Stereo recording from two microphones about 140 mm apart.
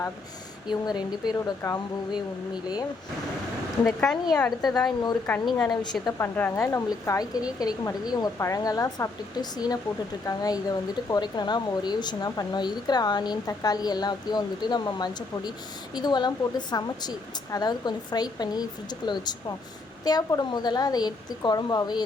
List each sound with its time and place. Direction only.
0.7 s speech: 30° left (ahead or behind)
3.8 s speech: centre (ahead or behind)
5.3 s speech: 20° left (ahead or behind)
6.1 s speech: 15° left (ahead or behind); by 22.0 s 30° left (ahead or behind)